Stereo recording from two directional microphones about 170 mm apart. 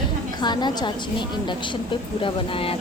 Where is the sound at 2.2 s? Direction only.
30° left (ahead or behind).